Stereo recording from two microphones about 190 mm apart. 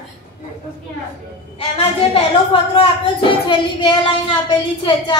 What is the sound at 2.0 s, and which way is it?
A woman's voice, 30° left (ahead or behind).